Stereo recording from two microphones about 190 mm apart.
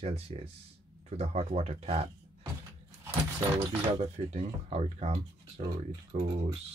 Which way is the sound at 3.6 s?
30° right (ahead or behind).